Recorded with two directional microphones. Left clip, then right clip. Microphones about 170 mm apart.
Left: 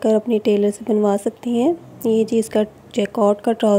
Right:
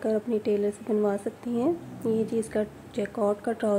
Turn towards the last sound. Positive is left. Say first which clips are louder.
# left 10 dB
turn(degrees=45)  # may be behind; listen again after turning